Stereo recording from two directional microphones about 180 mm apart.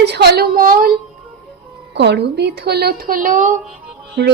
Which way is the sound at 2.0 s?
70° right (ahead or behind).